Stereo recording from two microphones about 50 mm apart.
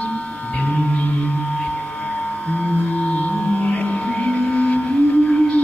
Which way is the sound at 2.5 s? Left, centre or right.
Left.